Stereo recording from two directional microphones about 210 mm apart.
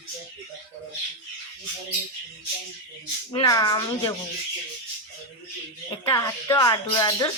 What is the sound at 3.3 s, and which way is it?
Speech, 20° left (ahead or behind).